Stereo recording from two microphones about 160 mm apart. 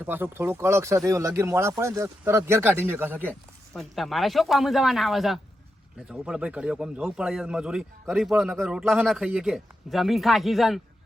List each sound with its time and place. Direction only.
0.0 s speech: 10° right (ahead or behind)
3.8 s speech: centre (ahead or behind)